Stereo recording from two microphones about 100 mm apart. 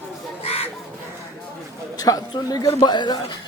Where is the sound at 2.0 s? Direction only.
35° left (ahead or behind).